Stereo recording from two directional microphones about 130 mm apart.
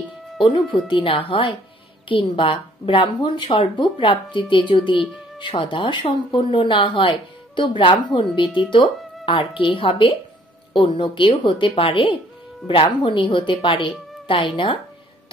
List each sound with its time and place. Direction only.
0.8 s a woman's voice: 40° left (ahead or behind)